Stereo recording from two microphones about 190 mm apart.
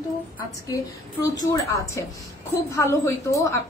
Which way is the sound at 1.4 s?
15° left (ahead or behind).